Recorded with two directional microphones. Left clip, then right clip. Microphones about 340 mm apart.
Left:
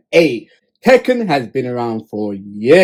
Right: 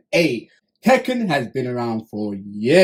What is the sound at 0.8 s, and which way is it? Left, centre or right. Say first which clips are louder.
Speech: left 6 dB; centre.